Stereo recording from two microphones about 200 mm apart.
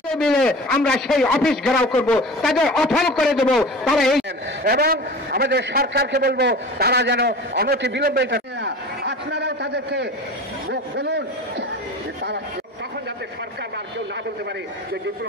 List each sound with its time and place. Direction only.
0.1 s a man's voice: 5° left (ahead or behind)
4.6 s a man's voice: 50° right (ahead or behind)